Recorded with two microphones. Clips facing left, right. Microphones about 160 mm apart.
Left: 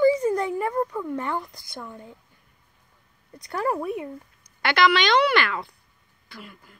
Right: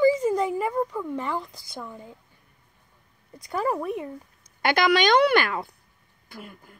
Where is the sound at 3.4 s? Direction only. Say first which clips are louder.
Even; 5° right (ahead or behind).